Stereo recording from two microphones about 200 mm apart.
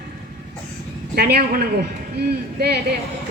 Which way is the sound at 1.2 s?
50° right (ahead or behind).